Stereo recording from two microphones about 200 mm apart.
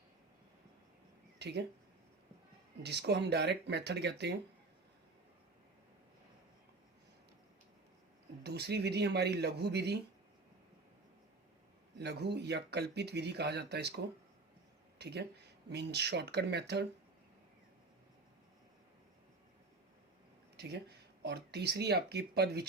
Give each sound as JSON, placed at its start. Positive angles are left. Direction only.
{"t": 1.4, "sound": "speech", "side_deg": -55}
{"t": 2.8, "sound": "speech", "side_deg": -55}
{"t": 8.4, "sound": "speech", "side_deg": -55}
{"t": 11.9, "sound": "speech", "side_deg": -55}
{"t": 20.6, "sound": "speech", "side_deg": -55}